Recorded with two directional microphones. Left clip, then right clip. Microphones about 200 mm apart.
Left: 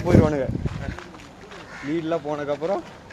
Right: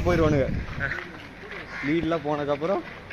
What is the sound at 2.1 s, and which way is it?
Speech, 45° right (ahead or behind).